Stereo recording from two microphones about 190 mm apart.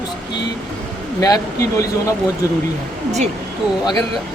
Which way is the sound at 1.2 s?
15° left (ahead or behind).